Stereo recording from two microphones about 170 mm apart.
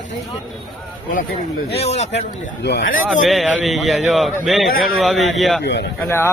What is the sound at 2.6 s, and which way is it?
Speech, 90° left.